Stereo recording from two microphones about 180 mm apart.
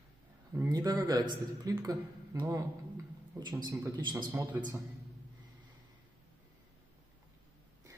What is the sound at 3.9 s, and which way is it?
Speech, 25° right (ahead or behind).